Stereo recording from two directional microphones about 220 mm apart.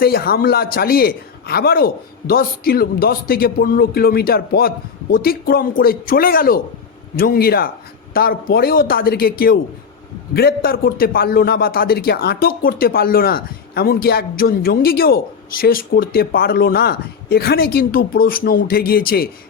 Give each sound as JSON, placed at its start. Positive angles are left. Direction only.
{"t": 0.0, "sound": "a man's voice", "side_deg": 45}